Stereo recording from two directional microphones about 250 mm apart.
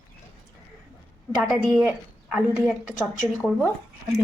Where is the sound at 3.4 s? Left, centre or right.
Centre.